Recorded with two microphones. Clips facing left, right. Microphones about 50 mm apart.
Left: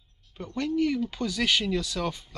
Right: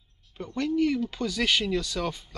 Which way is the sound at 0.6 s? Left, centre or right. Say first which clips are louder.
Right 1 dB; centre.